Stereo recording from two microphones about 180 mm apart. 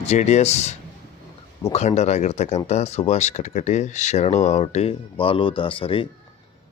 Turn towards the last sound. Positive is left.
turn(degrees=30)  # may be behind; listen again after turning